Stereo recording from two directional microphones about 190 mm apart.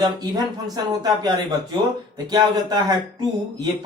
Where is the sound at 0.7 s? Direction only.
20° right (ahead or behind).